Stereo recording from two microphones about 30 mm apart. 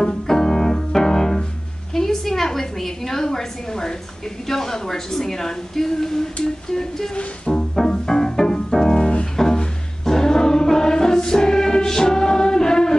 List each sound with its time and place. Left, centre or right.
0.3 s music: centre
2.0 s a woman's voice: centre
7.5 s music: centre